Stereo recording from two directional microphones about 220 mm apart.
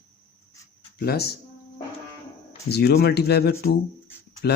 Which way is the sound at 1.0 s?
45° left (ahead or behind).